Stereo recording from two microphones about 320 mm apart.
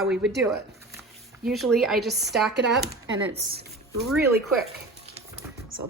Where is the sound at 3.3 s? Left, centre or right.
Right.